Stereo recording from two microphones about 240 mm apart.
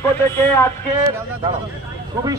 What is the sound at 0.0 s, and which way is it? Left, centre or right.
Speech, centre.